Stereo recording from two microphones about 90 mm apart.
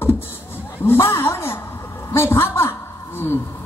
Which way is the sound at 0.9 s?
25° left (ahead or behind).